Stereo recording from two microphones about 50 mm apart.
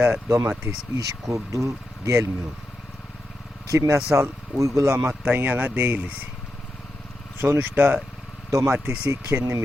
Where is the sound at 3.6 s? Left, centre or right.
Right.